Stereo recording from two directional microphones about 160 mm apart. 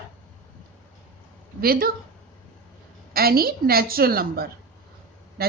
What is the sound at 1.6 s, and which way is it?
Speech, 65° right (ahead or behind).